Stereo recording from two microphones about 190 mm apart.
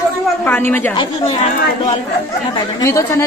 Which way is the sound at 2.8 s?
15° left (ahead or behind).